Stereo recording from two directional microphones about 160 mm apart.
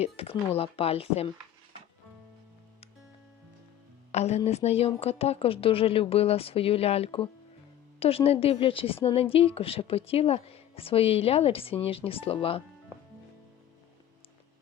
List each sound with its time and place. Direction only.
0.0 s a woman's voice: 40° left (ahead or behind)
4.1 s a woman's voice: 40° left (ahead or behind)